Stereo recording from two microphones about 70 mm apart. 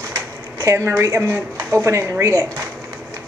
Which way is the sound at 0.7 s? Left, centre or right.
Right.